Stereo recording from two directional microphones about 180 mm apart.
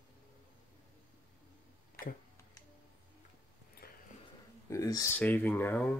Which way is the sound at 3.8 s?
55° left (ahead or behind).